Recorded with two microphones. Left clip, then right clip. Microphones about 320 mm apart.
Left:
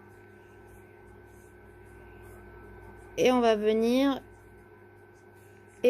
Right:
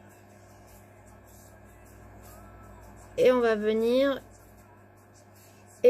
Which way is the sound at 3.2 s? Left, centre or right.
Left.